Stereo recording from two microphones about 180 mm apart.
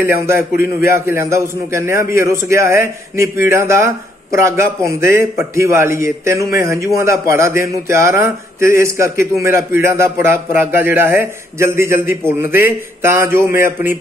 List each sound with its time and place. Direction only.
0.0 s a man's voice: 15° right (ahead or behind)